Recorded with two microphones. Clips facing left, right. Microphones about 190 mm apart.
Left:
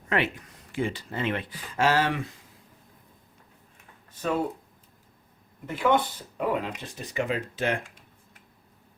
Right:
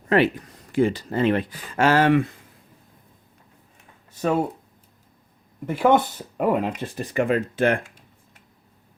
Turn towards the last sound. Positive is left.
turn(degrees=-55)  # may be behind; listen again after turning